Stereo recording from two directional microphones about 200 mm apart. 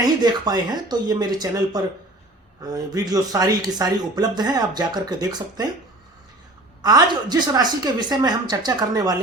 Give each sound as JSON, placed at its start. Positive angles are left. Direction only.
{"t": 0.0, "sound": "a man's voice", "side_deg": -20}
{"t": 6.8, "sound": "a man's voice", "side_deg": -20}